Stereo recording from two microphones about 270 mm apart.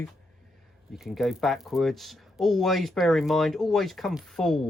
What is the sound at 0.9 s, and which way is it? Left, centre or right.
Speech, centre.